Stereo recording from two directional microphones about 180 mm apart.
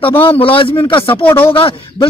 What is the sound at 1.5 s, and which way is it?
Speech, 30° left (ahead or behind).